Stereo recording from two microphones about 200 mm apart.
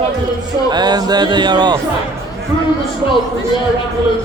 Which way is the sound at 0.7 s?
20° right (ahead or behind).